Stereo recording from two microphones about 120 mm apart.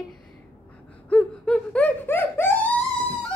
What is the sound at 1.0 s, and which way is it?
Wail, 10° left (ahead or behind).